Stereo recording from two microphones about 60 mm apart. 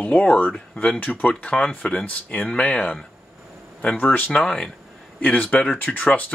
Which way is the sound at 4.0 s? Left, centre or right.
Left.